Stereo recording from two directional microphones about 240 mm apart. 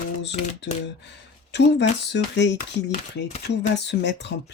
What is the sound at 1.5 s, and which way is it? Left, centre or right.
Speech, left.